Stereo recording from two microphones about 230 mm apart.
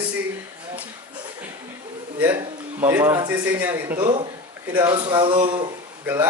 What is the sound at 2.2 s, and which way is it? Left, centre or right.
A man's voice, centre.